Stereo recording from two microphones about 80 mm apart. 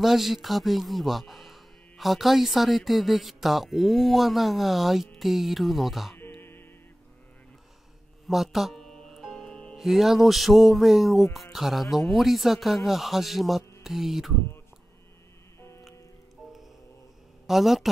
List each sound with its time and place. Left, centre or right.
0.0 s a man's voice: centre
6.1 s music: left
8.3 s music: centre
9.8 s a man's voice: centre
17.5 s a man's voice: centre